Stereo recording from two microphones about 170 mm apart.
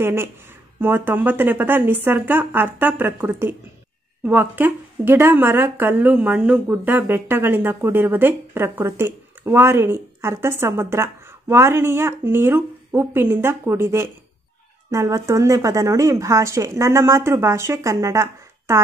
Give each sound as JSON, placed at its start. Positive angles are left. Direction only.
{"t": 0.0, "sound": "a woman's voice", "side_deg": -15}